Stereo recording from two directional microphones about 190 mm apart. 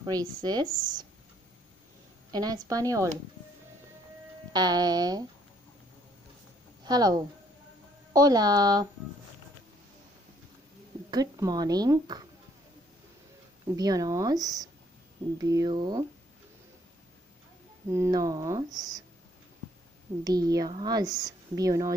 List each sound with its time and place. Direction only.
0.0 s a woman's voice: 20° right (ahead or behind)
0.7 s speech: 45° right (ahead or behind)
2.3 s a woman's voice: 20° right (ahead or behind)
4.5 s a woman's voice: 20° right (ahead or behind)
6.8 s a woman's voice: 20° right (ahead or behind)
11.1 s a woman's voice: 20° right (ahead or behind)
13.7 s a woman's voice: 20° right (ahead or behind)
17.8 s a woman's voice: 15° right (ahead or behind)
20.2 s a woman's voice: 20° right (ahead or behind)